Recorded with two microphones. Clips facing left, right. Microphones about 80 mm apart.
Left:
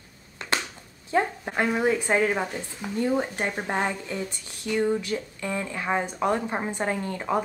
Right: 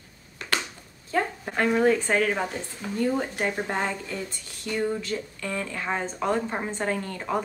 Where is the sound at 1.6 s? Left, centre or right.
Centre.